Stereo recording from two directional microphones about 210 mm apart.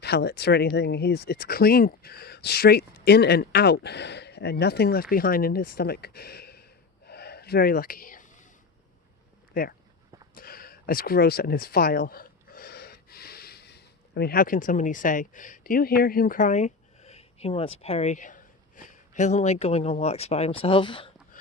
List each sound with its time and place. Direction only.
0.0 s speech: 50° left (ahead or behind)
7.1 s whispering: 50° left (ahead or behind)
9.5 s speech: 45° left (ahead or behind)
10.3 s a sound: 45° left (ahead or behind)
18.9 s speech: 35° left (ahead or behind)